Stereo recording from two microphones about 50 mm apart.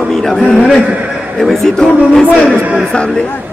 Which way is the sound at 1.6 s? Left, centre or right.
Centre.